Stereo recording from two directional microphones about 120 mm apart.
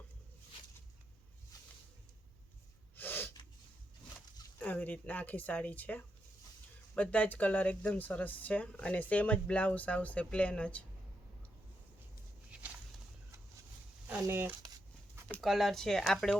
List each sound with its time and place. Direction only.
3.0 s snort: 15° left (ahead or behind)
4.6 s speech: 15° left (ahead or behind)
14.1 s speech: 15° right (ahead or behind)
15.4 s speech: centre (ahead or behind)